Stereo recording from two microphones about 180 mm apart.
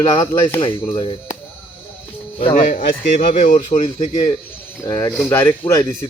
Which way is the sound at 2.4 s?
40° left (ahead or behind).